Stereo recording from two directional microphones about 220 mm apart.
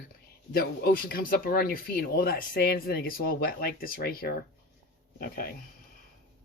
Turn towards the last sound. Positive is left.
turn(degrees=40)  # may be behind; listen again after turning